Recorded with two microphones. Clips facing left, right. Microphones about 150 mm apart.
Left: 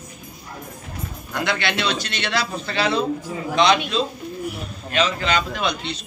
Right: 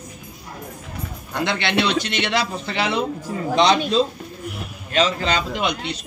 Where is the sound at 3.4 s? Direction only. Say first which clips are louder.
Right 1 dB; 35° right (ahead or behind).